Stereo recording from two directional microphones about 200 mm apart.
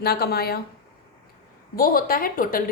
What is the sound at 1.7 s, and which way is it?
Speech, 45° left (ahead or behind).